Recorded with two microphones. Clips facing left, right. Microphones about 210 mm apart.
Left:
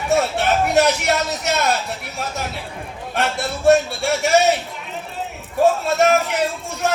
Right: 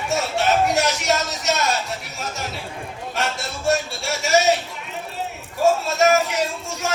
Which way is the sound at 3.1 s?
60° left (ahead or behind).